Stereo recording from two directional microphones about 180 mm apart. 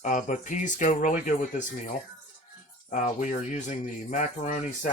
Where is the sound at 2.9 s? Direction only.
40° left (ahead or behind).